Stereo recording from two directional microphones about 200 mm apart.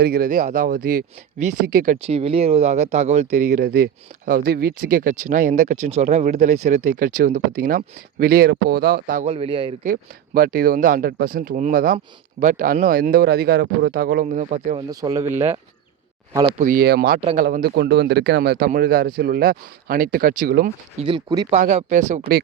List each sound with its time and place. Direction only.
0.0 s speech: 45° right (ahead or behind)
2.0 s speech: 30° right (ahead or behind)
3.6 s speech: 55° right (ahead or behind)
9.3 s speech: 25° right (ahead or behind)
9.8 s speech: 45° right (ahead or behind)
14.8 s a man's voice: 20° right (ahead or behind)
16.5 s speech: 40° right (ahead or behind)
21.0 s speech: 20° right (ahead or behind)
21.5 s speech: 35° right (ahead or behind)